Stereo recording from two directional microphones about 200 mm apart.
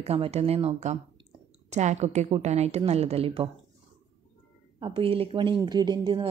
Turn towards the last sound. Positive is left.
turn(degrees=-25)  # may be behind; listen again after turning